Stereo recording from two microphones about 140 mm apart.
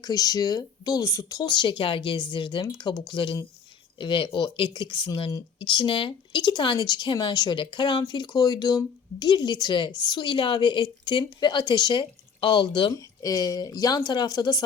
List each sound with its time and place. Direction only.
0.0 s speech: 25° left (ahead or behind)